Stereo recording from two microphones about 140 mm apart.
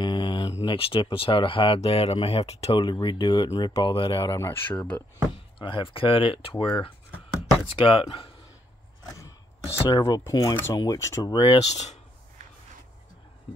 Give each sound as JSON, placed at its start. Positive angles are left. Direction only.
{"t": 0.0, "sound": "a sound", "side_deg": 35}
{"t": 0.7, "sound": "speech", "side_deg": 40}
{"t": 4.2, "sound": "speech", "side_deg": 20}
{"t": 5.6, "sound": "speech", "side_deg": 35}
{"t": 9.8, "sound": "speech", "side_deg": 25}
{"t": 11.7, "sound": "speech", "side_deg": 55}